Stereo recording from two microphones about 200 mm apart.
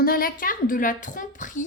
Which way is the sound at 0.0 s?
50° left (ahead or behind).